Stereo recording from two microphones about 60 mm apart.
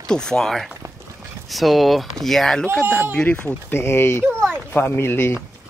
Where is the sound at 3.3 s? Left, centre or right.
Left.